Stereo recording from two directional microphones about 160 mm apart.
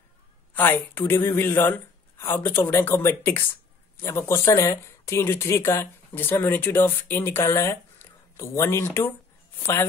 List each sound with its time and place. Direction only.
0.6 s speech: 15° left (ahead or behind)